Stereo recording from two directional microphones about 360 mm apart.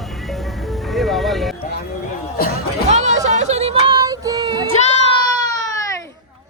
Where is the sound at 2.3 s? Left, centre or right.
Left.